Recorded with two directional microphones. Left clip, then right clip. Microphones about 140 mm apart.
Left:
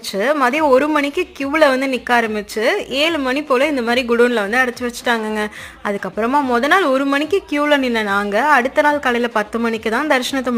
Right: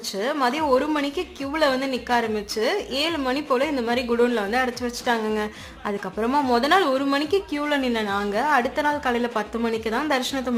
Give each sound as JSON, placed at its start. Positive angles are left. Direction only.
{"t": 0.2, "sound": "a woman's voice", "side_deg": 35}